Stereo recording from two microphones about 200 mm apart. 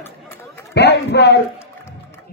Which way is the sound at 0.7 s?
55° left (ahead or behind).